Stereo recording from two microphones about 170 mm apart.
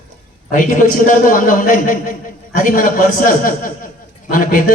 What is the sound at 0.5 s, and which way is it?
A man's voice, 50° left (ahead or behind).